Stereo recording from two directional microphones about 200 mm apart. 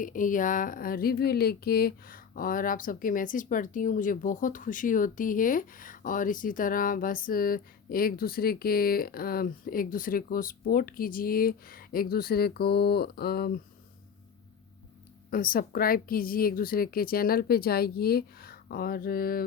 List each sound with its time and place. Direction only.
0.0 s speech: 40° left (ahead or behind)
15.3 s speech: 45° left (ahead or behind)